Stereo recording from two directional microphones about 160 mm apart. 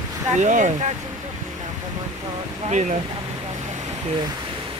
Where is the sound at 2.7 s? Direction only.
50° right (ahead or behind).